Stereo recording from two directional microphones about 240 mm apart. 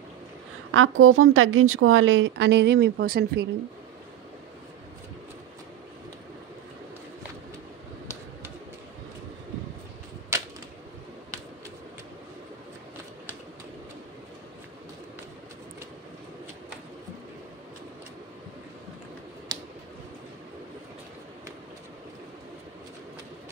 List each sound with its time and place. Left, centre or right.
0.7 s speech: right
10.3 s typewriter: centre
19.5 s a sound: centre